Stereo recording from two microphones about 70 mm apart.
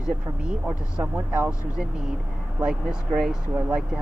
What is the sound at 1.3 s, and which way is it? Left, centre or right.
Speech, centre.